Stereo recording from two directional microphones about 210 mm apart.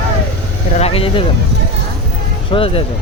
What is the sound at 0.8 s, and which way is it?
Speech, 25° left (ahead or behind).